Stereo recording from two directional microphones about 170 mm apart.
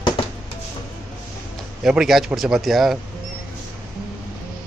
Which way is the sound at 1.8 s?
Centre (ahead or behind).